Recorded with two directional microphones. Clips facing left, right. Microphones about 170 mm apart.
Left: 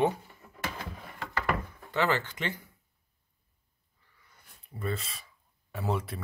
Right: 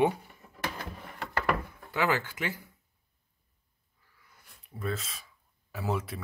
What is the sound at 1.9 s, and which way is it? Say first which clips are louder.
Speech: even; 10° right (ahead or behind).